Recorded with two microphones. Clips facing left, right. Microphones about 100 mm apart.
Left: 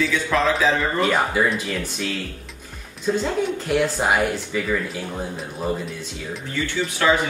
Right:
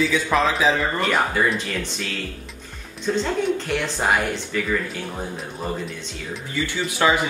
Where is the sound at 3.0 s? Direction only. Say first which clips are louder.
Even; 5° left (ahead or behind).